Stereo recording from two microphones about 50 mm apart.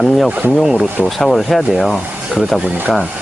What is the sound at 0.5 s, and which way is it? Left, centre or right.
Speech, centre.